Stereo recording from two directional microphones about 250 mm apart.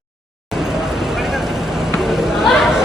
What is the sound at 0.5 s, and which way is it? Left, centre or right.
Vehicle, centre.